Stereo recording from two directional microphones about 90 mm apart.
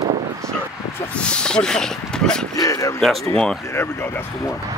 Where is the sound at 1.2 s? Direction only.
10° left (ahead or behind).